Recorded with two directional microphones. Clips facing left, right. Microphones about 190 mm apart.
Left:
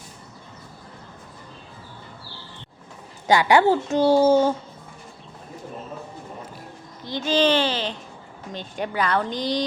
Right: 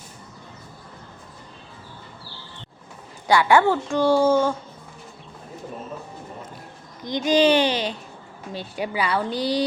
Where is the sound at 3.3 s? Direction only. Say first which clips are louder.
Left 1 dB; 15° left (ahead or behind).